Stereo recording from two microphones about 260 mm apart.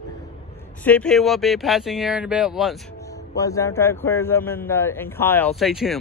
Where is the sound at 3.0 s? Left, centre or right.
Centre.